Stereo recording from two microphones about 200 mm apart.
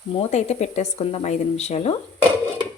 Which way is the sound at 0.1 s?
30° left (ahead or behind).